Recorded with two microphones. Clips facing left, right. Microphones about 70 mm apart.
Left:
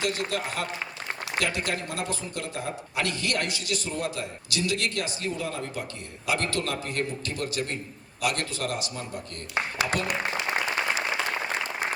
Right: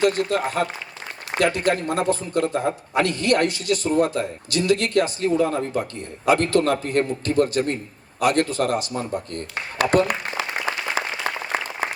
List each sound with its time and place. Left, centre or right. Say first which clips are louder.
0.0 s a man's voice: right 9 dB; right